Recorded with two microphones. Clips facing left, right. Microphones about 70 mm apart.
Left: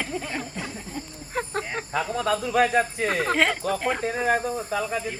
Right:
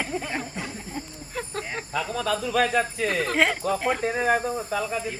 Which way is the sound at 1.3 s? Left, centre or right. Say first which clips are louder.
Left 4 dB; left.